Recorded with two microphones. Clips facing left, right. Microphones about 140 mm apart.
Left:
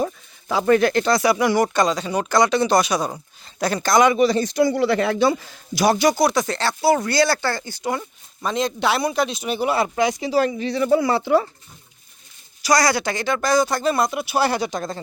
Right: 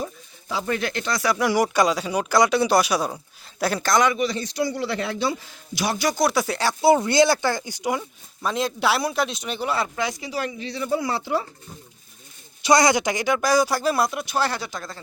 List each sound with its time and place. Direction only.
0.0 s a sound: 70° left (ahead or behind); by 1.1 s 45° left (ahead or behind)
1.4 s speech: 5° right (ahead or behind)
4.1 s a man's voice: 35° left (ahead or behind)
6.1 s speech: 5° right (ahead or behind); by 10.5 s 30° left (ahead or behind)
10.6 s a man's voice: 55° left (ahead or behind)
10.8 s speech: 70° left (ahead or behind)
12.6 s speech: 20° right (ahead or behind); by 15.0 s 20° left (ahead or behind)